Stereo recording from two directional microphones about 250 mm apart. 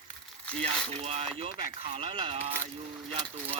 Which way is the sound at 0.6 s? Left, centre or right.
Right.